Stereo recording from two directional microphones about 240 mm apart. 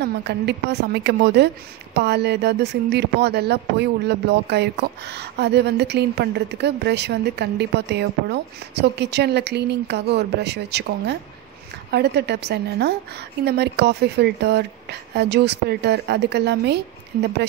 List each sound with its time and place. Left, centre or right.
0.0 s speech: right